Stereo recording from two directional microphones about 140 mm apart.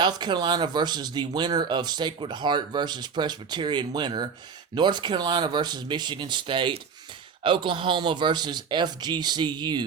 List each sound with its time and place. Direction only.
0.0 s speech: 30° right (ahead or behind)